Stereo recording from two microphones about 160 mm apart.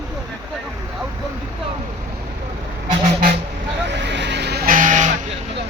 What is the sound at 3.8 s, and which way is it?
Vehicle, 90° right.